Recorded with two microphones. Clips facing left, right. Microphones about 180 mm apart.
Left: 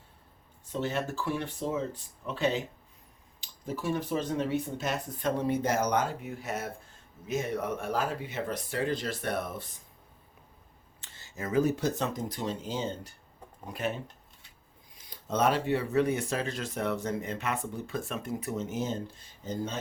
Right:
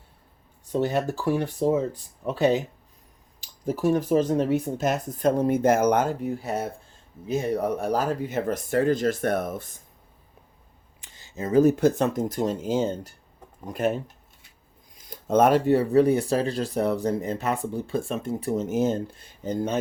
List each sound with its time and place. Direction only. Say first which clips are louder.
0.7 s speech: right 7 dB; 40° right (ahead or behind)
6.2 s speech: right 7 dB; 35° right (ahead or behind)
11.0 s a sound: right 6 dB; 15° right (ahead or behind)
11.6 s speech: right 9 dB; 55° right (ahead or behind)
15.0 s speech: right 8 dB; 50° right (ahead or behind)